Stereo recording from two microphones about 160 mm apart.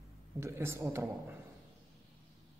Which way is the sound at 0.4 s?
15° right (ahead or behind).